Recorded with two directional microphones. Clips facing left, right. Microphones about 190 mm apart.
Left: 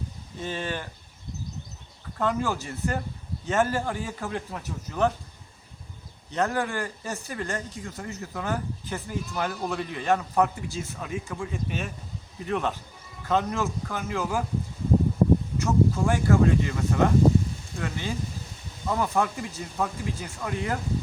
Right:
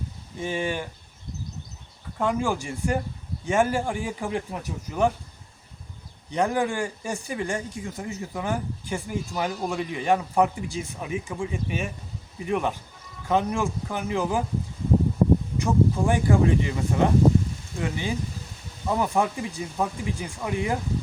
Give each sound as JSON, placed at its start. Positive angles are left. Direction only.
{"t": 0.3, "sound": "speech", "side_deg": -10}
{"t": 2.1, "sound": "speech", "side_deg": -15}
{"t": 6.3, "sound": "speech", "side_deg": -15}
{"t": 15.5, "sound": "speech", "side_deg": -15}